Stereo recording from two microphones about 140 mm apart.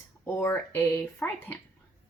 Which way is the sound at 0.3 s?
20° left (ahead or behind).